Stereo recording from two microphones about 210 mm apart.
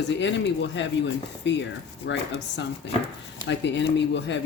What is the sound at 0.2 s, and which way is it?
Speech, 55° left (ahead or behind).